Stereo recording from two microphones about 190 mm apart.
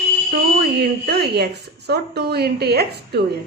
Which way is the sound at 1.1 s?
60° right (ahead or behind).